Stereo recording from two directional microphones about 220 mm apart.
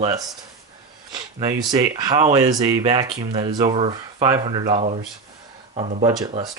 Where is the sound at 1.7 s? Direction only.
15° right (ahead or behind).